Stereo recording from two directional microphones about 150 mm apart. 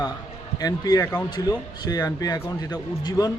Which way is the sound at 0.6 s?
25° left (ahead or behind).